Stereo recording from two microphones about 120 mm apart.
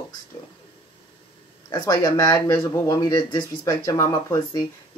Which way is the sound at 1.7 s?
30° left (ahead or behind).